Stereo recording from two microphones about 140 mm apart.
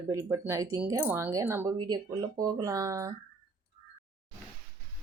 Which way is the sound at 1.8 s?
30° right (ahead or behind).